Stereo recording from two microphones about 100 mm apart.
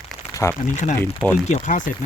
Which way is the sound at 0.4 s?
25° left (ahead or behind).